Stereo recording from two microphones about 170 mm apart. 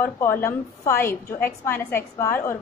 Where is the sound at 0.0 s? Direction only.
15° left (ahead or behind).